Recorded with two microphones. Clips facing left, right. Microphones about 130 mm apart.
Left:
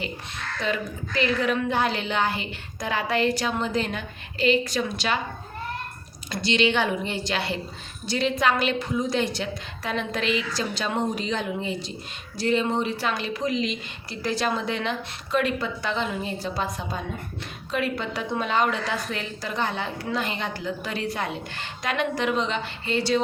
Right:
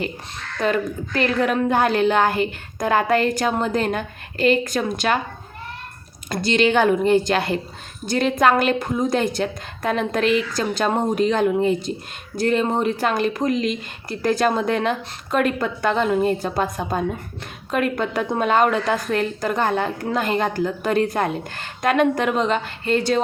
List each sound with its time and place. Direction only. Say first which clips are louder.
0.6 s a woman's voice: right 7 dB; 50° right (ahead or behind)
6.3 s a woman's voice: right 5 dB; 45° right (ahead or behind)